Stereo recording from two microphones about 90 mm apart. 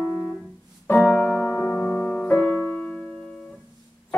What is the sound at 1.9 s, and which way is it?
Music, 10° left (ahead or behind).